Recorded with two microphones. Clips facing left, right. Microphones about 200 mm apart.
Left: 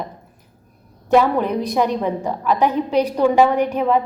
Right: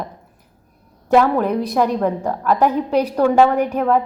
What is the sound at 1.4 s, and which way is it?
A woman's voice, 5° right (ahead or behind).